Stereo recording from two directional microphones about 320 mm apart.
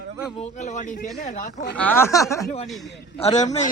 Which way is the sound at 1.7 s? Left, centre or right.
Centre.